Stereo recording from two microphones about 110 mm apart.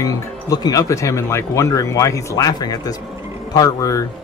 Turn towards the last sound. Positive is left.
turn(degrees=30)  # may be behind; listen again after turning